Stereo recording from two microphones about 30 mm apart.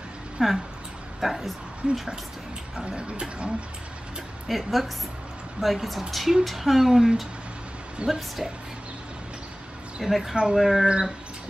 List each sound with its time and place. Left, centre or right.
0.4 s speech: centre
1.8 s speech: right
4.5 s speech: centre
8.0 s speech: right
10.0 s speech: centre